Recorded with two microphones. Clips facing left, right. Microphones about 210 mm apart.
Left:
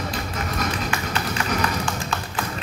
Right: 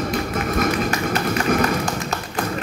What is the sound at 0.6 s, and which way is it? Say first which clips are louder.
Tap: right 6 dB; 45° right (ahead or behind).